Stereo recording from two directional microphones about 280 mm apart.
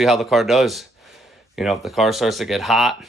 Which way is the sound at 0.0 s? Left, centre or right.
Centre.